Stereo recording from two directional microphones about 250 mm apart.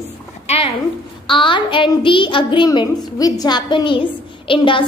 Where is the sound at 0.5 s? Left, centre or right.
Left.